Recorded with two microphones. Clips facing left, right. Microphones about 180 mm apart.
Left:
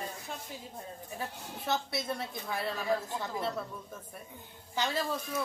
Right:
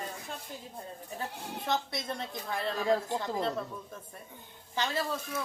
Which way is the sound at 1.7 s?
5° left (ahead or behind).